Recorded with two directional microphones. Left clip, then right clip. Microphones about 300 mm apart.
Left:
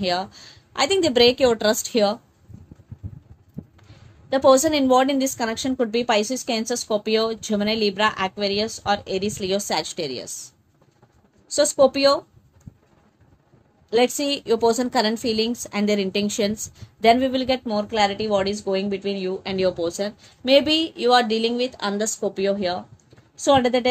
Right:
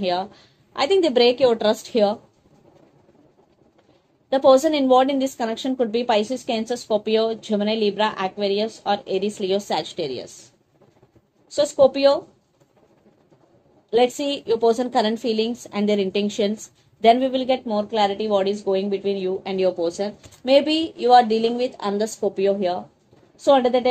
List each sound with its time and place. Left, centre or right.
0.0 s a woman's voice: left
4.3 s a woman's voice: left
11.5 s a woman's voice: left
13.8 s a woman's voice: left